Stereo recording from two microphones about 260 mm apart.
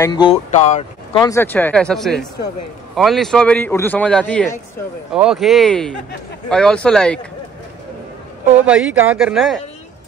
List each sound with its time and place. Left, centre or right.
0.0 s speech: centre
1.2 s a man's voice: centre
8.6 s a man's voice: centre